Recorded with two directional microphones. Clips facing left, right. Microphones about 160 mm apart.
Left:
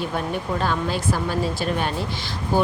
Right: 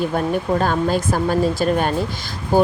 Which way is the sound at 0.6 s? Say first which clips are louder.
Right 5 dB; 45° right (ahead or behind).